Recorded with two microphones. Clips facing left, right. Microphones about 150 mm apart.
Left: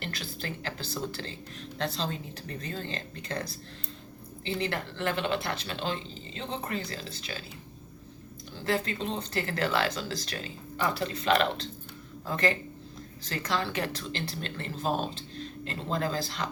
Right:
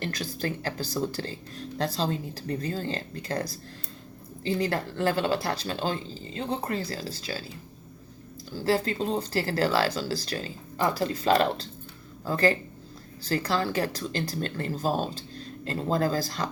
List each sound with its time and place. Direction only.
0.0 s speech: 45° right (ahead or behind)
8.5 s speech: 30° right (ahead or behind)